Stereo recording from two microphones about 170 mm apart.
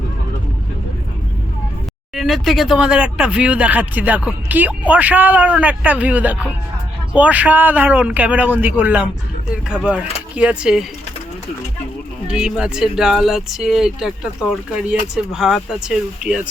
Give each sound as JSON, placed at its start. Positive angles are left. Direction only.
{"t": 2.1, "sound": "a man's voice", "side_deg": 0}
{"t": 12.3, "sound": "speech", "side_deg": -5}